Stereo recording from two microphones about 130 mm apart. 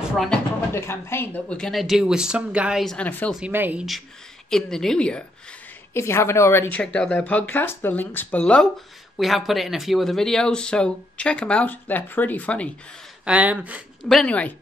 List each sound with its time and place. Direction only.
0.7 s speech: 20° left (ahead or behind); by 2.8 s 10° right (ahead or behind)
2.8 s speech: 5° left (ahead or behind)
3.3 s speech: 10° right (ahead or behind)
4.5 s speech: 5° left (ahead or behind)
5.9 s speech: 20° left (ahead or behind)
13.2 s speech: 10° right (ahead or behind)
14.0 s speech: 5° left (ahead or behind)